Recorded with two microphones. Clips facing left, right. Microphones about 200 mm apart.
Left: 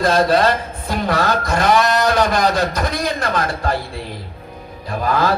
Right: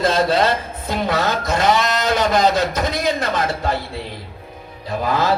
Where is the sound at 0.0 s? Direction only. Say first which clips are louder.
Left 2 dB; 20° right (ahead or behind).